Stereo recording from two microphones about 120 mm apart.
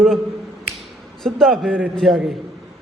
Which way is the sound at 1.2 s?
5° left (ahead or behind).